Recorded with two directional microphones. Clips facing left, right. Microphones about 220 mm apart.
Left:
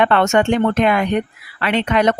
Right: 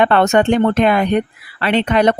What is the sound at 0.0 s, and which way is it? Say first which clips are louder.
Speech: right 2 dB; 35° right (ahead or behind).